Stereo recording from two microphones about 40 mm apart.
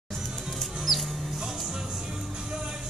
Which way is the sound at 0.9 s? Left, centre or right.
Centre.